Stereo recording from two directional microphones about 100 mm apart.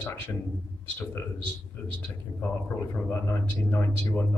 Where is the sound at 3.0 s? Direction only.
25° left (ahead or behind).